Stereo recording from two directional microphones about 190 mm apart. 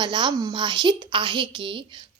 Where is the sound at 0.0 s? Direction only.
25° right (ahead or behind).